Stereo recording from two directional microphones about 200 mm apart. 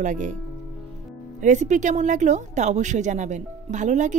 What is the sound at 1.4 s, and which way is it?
Speech, 35° right (ahead or behind).